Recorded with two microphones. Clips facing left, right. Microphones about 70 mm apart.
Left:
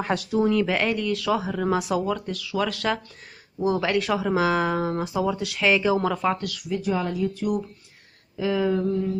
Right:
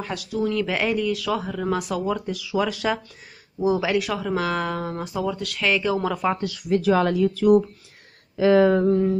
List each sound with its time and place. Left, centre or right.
0.0 s speech: left
0.4 s speech: centre
0.7 s speech: centre
2.0 s speech: centre
4.1 s speech: centre
6.3 s speech: right
6.7 s speech: right
8.4 s a sound: right